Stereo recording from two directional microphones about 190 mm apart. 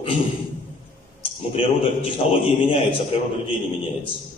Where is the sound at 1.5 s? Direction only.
30° left (ahead or behind).